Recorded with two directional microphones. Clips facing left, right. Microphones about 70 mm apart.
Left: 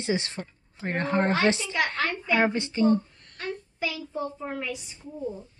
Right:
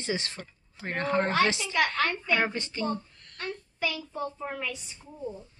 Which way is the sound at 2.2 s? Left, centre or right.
Centre.